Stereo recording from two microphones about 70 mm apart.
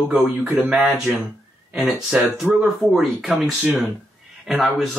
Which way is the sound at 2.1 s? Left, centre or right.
Centre.